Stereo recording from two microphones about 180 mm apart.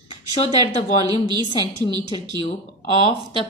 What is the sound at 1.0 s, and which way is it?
Speech, 25° right (ahead or behind).